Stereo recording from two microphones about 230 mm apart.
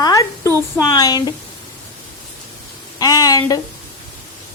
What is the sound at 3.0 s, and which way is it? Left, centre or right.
Speech, centre.